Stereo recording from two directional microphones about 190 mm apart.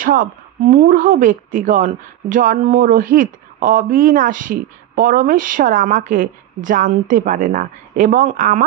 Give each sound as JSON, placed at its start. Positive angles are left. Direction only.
{"t": 0.0, "sound": "speech", "side_deg": -45}